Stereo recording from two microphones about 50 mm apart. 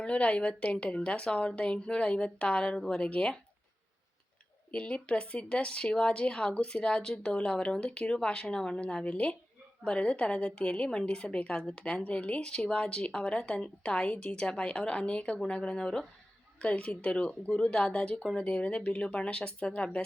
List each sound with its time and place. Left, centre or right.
0.0 s speech: left
4.7 s speech: left
16.6 s speech: left